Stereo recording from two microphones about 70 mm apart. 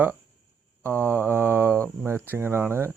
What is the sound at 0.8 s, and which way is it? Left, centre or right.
Speech, right.